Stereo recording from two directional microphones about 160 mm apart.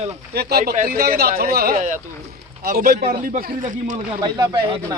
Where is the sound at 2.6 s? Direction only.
70° right (ahead or behind).